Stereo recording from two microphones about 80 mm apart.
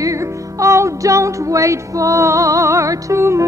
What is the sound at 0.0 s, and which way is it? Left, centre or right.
Music, right.